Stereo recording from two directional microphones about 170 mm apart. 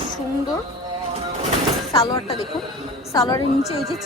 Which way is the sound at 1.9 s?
30° left (ahead or behind).